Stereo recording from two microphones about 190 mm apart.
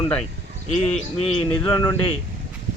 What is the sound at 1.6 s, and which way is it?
Speech, 20° left (ahead or behind).